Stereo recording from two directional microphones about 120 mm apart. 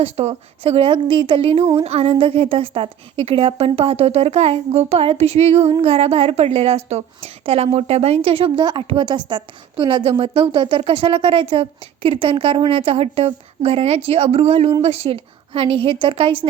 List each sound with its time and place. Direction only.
0.0 s a woman's voice: 60° right (ahead or behind)